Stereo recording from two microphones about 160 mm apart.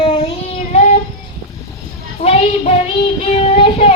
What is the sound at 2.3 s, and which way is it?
Child singing, 40° left (ahead or behind).